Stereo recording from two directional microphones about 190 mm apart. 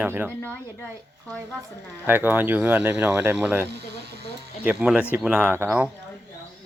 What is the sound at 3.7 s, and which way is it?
Speech, 60° right (ahead or behind).